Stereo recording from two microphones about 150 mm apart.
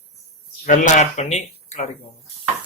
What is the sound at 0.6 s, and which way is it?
Speech, 55° left (ahead or behind).